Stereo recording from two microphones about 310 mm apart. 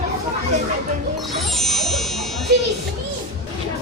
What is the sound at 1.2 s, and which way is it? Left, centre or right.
Wind chime, centre.